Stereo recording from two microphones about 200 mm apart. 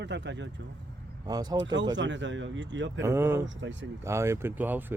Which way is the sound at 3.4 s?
65° right (ahead or behind).